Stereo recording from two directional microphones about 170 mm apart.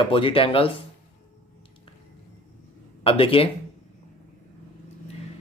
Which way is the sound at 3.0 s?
30° left (ahead or behind).